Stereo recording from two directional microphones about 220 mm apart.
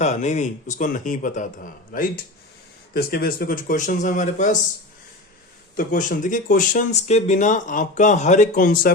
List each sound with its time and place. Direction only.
0.0 s speech: 30° left (ahead or behind)
5.7 s speech: 35° left (ahead or behind)